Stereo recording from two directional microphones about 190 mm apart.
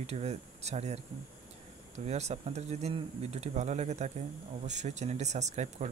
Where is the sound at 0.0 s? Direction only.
35° right (ahead or behind).